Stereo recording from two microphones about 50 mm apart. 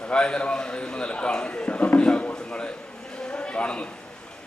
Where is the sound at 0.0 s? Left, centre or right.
Centre.